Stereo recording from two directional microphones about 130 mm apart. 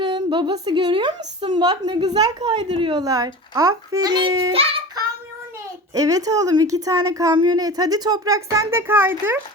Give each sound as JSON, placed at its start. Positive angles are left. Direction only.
{"t": 0.0, "sound": "a woman's voice", "side_deg": -40}
{"t": 2.6, "sound": "speech", "side_deg": -50}
{"t": 3.0, "sound": "a child's voice", "side_deg": -25}
{"t": 5.9, "sound": "a child's voice", "side_deg": -25}